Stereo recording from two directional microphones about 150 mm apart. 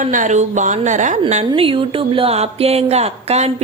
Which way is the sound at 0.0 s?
55° right (ahead or behind).